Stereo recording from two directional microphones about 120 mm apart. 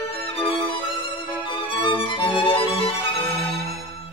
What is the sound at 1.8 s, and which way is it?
Music, 45° left (ahead or behind).